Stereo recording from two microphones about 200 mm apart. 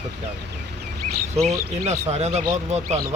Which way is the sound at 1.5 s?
35° right (ahead or behind).